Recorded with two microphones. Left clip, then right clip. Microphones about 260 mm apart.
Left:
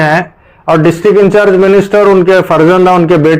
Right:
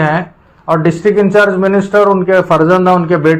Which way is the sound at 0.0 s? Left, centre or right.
Left.